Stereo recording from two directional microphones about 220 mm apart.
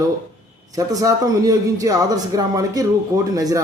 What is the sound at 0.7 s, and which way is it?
A man's voice, 15° right (ahead or behind).